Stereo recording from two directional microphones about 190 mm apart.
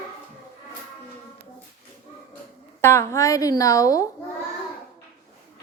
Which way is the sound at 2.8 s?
15° left (ahead or behind).